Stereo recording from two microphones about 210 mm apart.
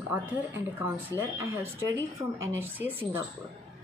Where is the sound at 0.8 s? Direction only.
10° right (ahead or behind).